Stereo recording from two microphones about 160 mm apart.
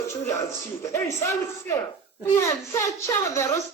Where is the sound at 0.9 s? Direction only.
20° left (ahead or behind).